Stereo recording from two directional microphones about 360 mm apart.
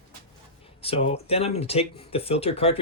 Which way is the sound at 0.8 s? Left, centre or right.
Centre.